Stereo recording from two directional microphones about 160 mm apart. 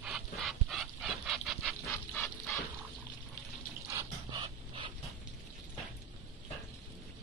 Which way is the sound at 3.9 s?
30° right (ahead or behind).